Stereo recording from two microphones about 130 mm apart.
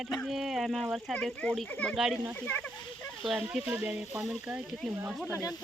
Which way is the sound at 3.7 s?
10° right (ahead or behind).